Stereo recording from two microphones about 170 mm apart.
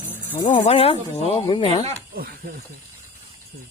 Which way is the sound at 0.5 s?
35° left (ahead or behind).